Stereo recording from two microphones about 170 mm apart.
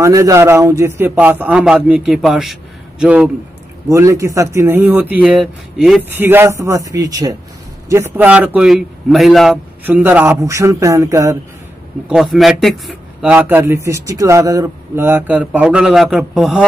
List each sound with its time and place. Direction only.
0.0 s a man's voice: 20° right (ahead or behind)
12.1 s a man's voice: centre (ahead or behind)